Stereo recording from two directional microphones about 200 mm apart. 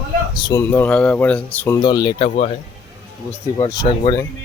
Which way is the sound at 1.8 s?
20° left (ahead or behind).